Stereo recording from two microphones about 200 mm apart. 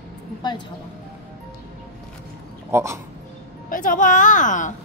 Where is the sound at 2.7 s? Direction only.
15° right (ahead or behind).